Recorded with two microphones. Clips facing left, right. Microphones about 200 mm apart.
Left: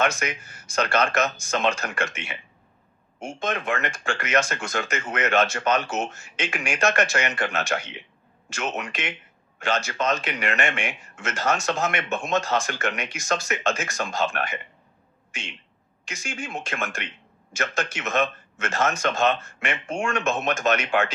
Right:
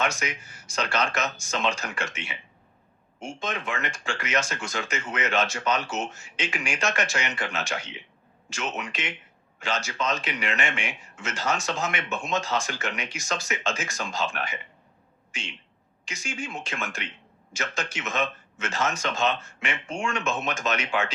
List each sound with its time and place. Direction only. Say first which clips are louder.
0.0 s a man's voice: left 4 dB; 55° left (ahead or behind)
16.0 s a man's voice: left 1 dB; 55° left (ahead or behind)